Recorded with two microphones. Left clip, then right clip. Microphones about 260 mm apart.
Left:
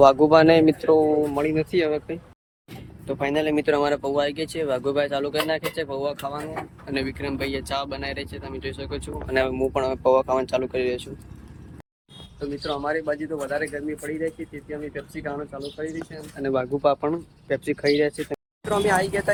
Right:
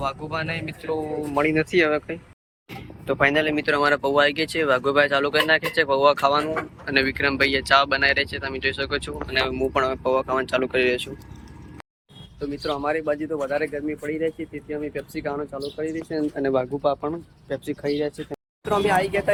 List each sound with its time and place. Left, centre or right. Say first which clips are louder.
0.0 s speech: left 14 dB; left
1.4 s speech: right 3 dB; centre
12.6 s speech: right 2 dB; centre